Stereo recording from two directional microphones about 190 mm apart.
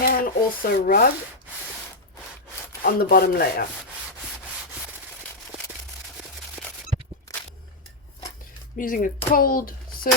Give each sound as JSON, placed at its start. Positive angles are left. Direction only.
{"t": 0.0, "sound": "speech", "side_deg": 50}
{"t": 2.8, "sound": "rub", "side_deg": 50}
{"t": 7.3, "sound": "walk", "side_deg": 20}
{"t": 8.8, "sound": "rub", "side_deg": 45}
{"t": 9.3, "sound": "a child's voice", "side_deg": 50}